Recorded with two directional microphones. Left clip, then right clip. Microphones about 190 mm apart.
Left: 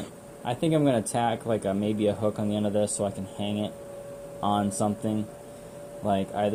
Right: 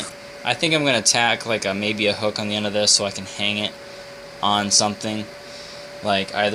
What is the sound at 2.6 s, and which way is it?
Speech, 35° right (ahead or behind).